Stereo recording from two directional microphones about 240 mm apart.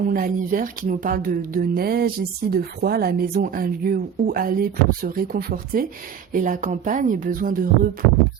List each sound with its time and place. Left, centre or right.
0.1 s speech: right